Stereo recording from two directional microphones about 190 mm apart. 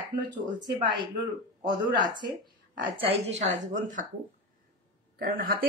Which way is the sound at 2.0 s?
25° right (ahead or behind).